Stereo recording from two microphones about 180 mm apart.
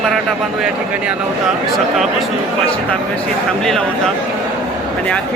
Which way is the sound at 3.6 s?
5° left (ahead or behind).